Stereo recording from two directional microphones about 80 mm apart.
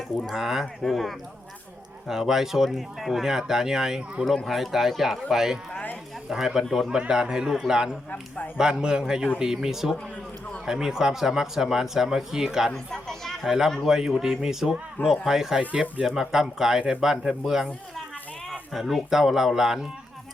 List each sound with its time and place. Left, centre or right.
0.3 s speech: centre
5.7 s a sound: centre
6.2 s a man's voice: centre
12.7 s a man's voice: centre
18.7 s speech: centre